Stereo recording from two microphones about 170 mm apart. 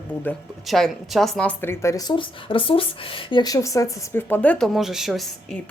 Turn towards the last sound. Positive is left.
turn(degrees=0)  # may be behind; listen again after turning